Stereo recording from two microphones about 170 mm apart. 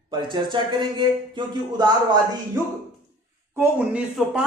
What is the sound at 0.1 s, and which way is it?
A man's voice, 25° right (ahead or behind).